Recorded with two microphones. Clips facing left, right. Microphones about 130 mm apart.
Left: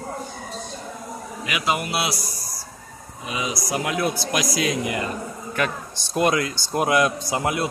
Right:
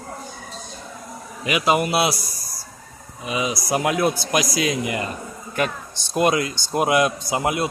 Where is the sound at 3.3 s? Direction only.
30° right (ahead or behind).